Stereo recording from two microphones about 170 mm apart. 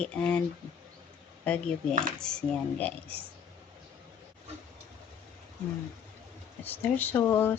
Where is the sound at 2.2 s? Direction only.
5° left (ahead or behind).